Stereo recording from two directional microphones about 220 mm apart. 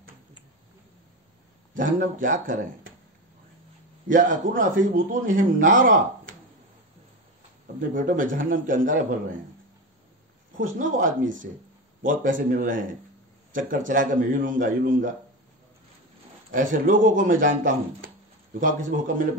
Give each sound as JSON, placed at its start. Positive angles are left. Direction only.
{"t": 1.7, "sound": "a man's voice", "side_deg": -35}
{"t": 4.6, "sound": "a man's voice", "side_deg": -35}
{"t": 7.9, "sound": "a man's voice", "side_deg": -35}
{"t": 10.6, "sound": "a man's voice", "side_deg": -35}
{"t": 16.5, "sound": "a man's voice", "side_deg": -35}